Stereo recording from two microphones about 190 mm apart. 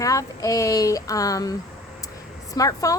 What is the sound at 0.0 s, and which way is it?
A woman's voice, 15° left (ahead or behind).